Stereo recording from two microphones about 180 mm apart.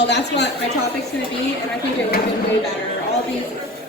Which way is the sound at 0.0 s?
70° left (ahead or behind).